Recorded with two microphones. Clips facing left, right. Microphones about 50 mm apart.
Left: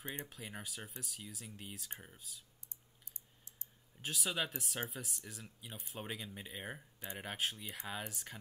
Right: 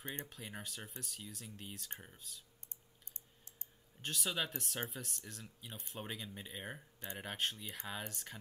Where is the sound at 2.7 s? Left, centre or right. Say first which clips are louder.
Right 1 dB; right.